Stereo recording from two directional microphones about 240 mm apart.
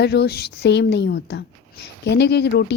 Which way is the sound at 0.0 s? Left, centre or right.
Left.